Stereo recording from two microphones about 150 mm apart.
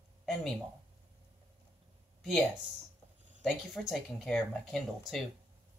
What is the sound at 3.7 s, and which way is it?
Speech, centre (ahead or behind).